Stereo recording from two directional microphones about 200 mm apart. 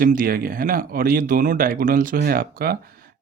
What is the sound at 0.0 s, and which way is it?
Speech, 45° right (ahead or behind).